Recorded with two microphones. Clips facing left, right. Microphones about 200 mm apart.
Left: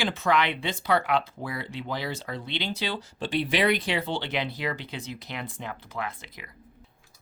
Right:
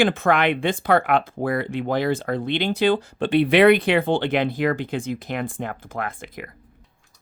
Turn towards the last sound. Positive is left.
turn(degrees=-50)  # may be behind; listen again after turning